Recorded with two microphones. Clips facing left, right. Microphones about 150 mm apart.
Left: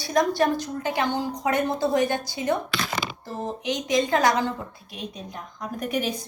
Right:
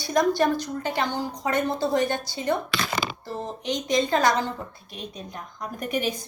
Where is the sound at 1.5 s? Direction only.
10° left (ahead or behind).